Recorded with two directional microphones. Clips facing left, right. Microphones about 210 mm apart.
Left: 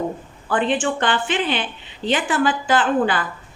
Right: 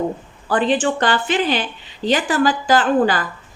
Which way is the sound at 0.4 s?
35° right (ahead or behind).